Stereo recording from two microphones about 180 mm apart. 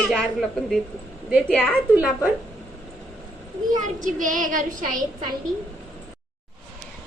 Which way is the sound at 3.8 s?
45° right (ahead or behind).